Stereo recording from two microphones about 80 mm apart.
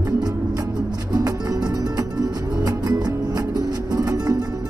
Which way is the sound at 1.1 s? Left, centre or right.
Right.